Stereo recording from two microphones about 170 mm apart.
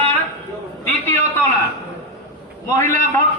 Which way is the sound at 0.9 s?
10° left (ahead or behind).